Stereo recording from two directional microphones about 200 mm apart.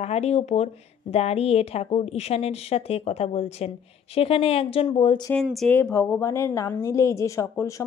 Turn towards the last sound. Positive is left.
turn(degrees=15)  # may be behind; listen again after turning